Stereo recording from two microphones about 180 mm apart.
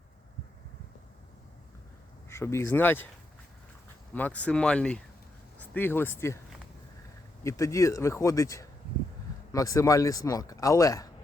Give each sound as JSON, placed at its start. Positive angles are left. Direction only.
{"t": 2.3, "sound": "speech", "side_deg": 15}
{"t": 4.1, "sound": "speech", "side_deg": 10}
{"t": 7.4, "sound": "speech", "side_deg": 15}